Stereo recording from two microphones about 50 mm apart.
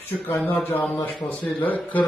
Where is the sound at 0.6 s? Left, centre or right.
Left.